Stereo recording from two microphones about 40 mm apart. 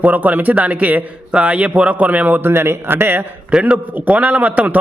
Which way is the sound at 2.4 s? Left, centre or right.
Right.